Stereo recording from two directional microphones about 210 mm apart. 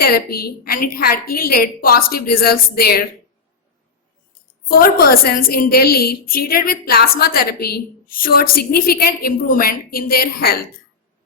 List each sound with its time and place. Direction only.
0.0 s a woman's voice: 45° left (ahead or behind)
4.8 s a woman's voice: 45° left (ahead or behind)